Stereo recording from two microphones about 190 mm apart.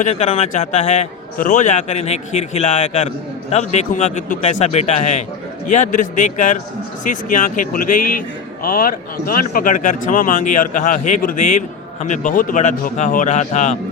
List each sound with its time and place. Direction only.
0.0 s a man's voice: 35° left (ahead or behind)